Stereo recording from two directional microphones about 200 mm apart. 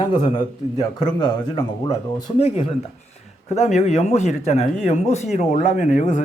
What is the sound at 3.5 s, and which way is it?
Speech, 35° left (ahead or behind).